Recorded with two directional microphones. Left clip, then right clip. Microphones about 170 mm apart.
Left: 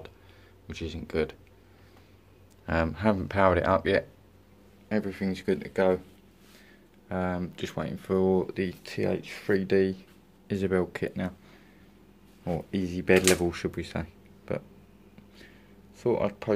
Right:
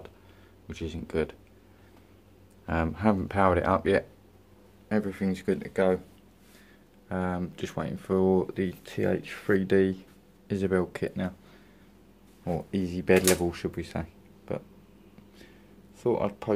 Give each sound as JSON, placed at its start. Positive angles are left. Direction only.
{"t": 0.7, "sound": "speech", "side_deg": 0}
{"t": 2.6, "sound": "speech", "side_deg": 0}
{"t": 7.1, "sound": "speech", "side_deg": 0}
{"t": 9.5, "sound": "speech", "side_deg": -15}
{"t": 10.5, "sound": "speech", "side_deg": 0}
{"t": 12.4, "sound": "speech", "side_deg": 0}
{"t": 16.0, "sound": "speech", "side_deg": 5}